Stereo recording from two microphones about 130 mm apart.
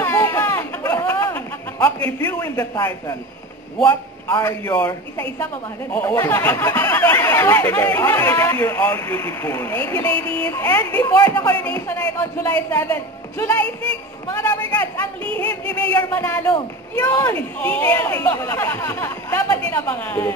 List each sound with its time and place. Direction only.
0.0 s a sound: 20° left (ahead or behind)
2.0 s a man's voice: 15° left (ahead or behind)
10.1 s speech: 45° right (ahead or behind)
10.4 s speech: 15° left (ahead or behind)
11.0 s a man's voice: 25° left (ahead or behind)
16.1 s speech: 15° left (ahead or behind)